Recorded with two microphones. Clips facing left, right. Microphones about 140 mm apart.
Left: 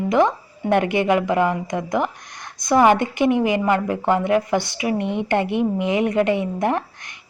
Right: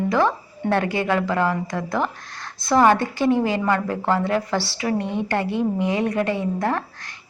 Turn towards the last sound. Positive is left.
turn(degrees=20)  # may be behind; listen again after turning